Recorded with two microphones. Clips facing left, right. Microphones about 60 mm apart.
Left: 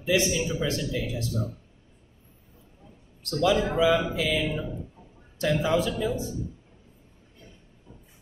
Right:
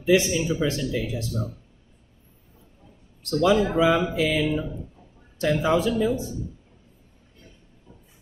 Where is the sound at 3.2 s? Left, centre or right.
Right.